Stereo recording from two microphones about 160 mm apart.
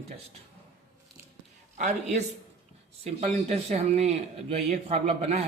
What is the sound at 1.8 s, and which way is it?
A man's voice, 45° right (ahead or behind).